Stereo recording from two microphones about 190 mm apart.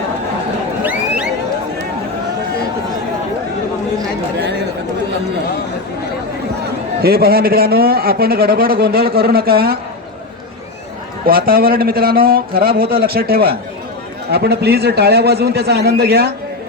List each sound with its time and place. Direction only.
0.9 s a sound: 5° right (ahead or behind)
7.0 s a man's voice: 55° right (ahead or behind)
11.3 s a man's voice: 50° right (ahead or behind)